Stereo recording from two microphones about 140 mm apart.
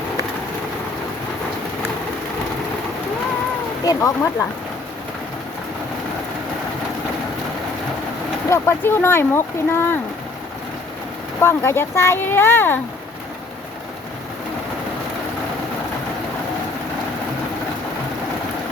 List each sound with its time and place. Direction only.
3.8 s speech: 20° left (ahead or behind)
8.4 s speech: 20° left (ahead or behind)
11.3 s speech: 20° left (ahead or behind)